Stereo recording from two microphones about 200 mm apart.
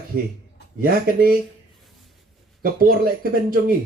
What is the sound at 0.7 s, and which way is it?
Speech, 45° right (ahead or behind).